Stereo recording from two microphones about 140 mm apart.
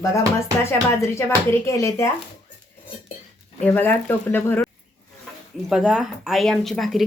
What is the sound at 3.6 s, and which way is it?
Speech, 15° left (ahead or behind).